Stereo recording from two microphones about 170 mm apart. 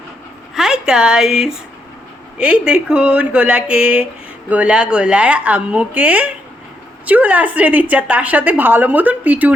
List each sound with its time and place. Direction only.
0.5 s a woman's voice: 5° right (ahead or behind)